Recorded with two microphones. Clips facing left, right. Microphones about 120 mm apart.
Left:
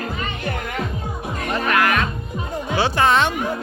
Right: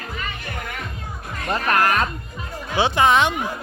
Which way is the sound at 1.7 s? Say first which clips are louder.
Even; 40° right (ahead or behind).